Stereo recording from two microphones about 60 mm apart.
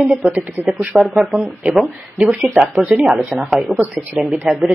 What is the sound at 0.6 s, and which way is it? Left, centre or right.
Speech, right.